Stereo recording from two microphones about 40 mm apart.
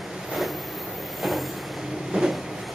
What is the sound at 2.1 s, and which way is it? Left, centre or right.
Vehicle, right.